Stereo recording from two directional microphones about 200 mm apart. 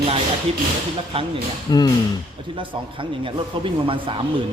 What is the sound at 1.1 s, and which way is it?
Speech, 25° right (ahead or behind).